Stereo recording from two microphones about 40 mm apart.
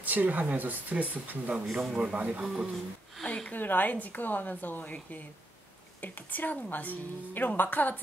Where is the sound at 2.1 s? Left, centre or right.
Right.